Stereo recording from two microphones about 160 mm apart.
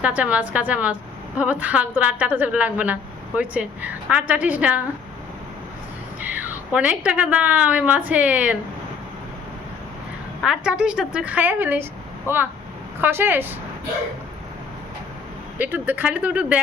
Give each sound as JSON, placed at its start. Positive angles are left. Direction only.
{"t": 0.0, "sound": "a woman's voice", "side_deg": -10}
{"t": 6.1, "sound": "a woman's voice", "side_deg": -10}
{"t": 10.4, "sound": "a woman's voice", "side_deg": -5}
{"t": 12.3, "sound": "speech", "side_deg": 15}
{"t": 13.0, "sound": "a woman's voice", "side_deg": -15}
{"t": 15.5, "sound": "a woman's voice", "side_deg": -10}